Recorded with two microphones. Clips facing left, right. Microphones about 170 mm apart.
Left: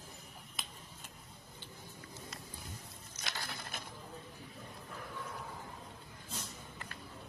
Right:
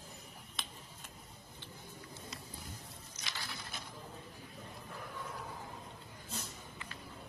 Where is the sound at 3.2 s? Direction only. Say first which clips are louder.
Left 3 dB; 50° left (ahead or behind).